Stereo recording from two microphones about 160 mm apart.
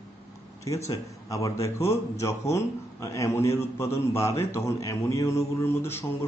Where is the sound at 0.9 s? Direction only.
20° left (ahead or behind).